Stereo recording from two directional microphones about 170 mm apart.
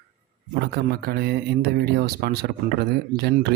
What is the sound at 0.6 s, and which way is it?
Speech, 70° right (ahead or behind).